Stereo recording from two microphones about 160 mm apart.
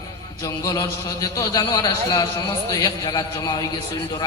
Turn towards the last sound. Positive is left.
turn(degrees=25)  # may be behind; listen again after turning